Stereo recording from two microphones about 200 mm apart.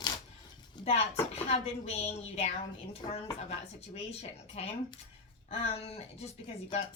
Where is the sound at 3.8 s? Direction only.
30° left (ahead or behind).